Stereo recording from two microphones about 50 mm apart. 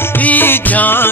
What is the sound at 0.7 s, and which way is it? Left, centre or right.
Music, left.